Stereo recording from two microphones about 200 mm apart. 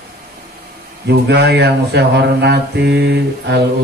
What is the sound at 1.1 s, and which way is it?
Speech, 55° right (ahead or behind).